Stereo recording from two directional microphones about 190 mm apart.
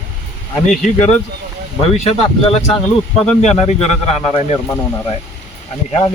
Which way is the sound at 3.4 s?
35° left (ahead or behind).